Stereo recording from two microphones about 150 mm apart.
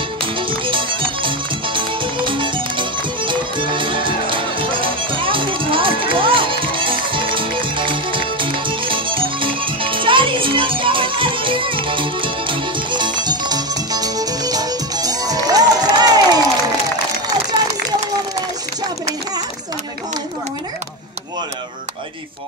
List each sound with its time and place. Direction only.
0.4 s music: 35° right (ahead or behind)